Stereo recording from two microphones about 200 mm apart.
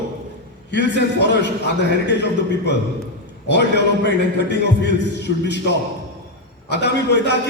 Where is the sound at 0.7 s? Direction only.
60° left (ahead or behind).